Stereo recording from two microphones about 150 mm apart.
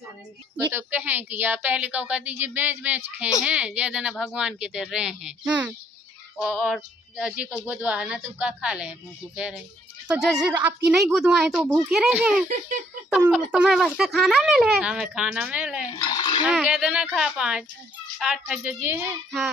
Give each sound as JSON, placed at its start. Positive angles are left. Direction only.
{"t": 0.7, "sound": "a woman's voice", "side_deg": -15}
{"t": 10.0, "sound": "speech", "side_deg": -5}
{"t": 15.9, "sound": "speech", "side_deg": 35}
{"t": 16.4, "sound": "a woman's voice", "side_deg": -5}